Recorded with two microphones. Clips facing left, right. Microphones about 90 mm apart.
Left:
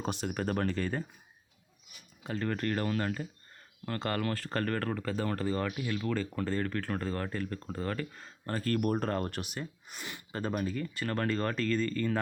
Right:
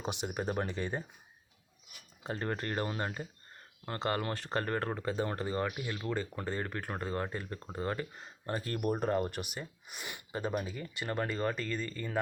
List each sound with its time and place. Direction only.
0.0 s speech: 15° right (ahead or behind)
2.2 s speech: 25° right (ahead or behind); by 12.2 s 10° right (ahead or behind)